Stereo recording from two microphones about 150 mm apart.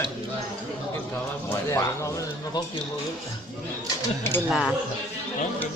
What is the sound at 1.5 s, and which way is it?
Speech, 20° left (ahead or behind).